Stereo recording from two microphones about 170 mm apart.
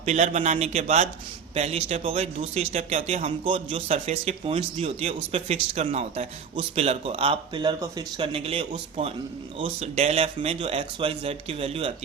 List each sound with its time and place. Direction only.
0.0 s a man's voice: 40° right (ahead or behind)